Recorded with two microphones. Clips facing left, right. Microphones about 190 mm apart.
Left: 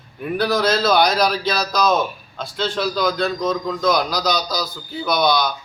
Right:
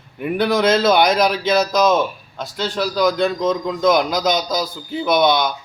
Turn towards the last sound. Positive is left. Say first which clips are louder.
# right 3 dB
turn(degrees=-25)  # may be behind; listen again after turning